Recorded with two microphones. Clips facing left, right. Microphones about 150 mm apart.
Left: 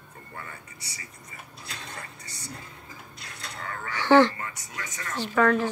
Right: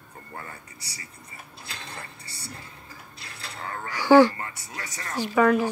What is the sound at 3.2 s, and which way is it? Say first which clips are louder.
Mechanisms: right 1 dB; 30° right (ahead or behind).